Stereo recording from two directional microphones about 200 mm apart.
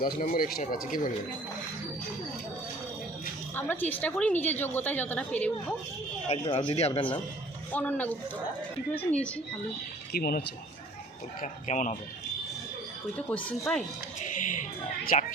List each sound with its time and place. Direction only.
0.0 s speech: 45° left (ahead or behind)
3.5 s a woman's voice: 10° left (ahead or behind)
6.2 s speech: 30° left (ahead or behind)
7.7 s a woman's voice: 10° left (ahead or behind)
10.1 s speech: 50° left (ahead or behind)
11.7 s speech: 35° left (ahead or behind)
13.1 s a woman's voice: 5° left (ahead or behind)
14.3 s speech: 40° left (ahead or behind)